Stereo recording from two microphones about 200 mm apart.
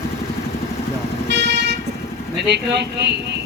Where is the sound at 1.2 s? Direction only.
60° right (ahead or behind).